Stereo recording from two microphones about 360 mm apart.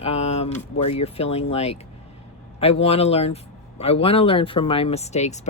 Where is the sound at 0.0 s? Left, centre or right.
Centre.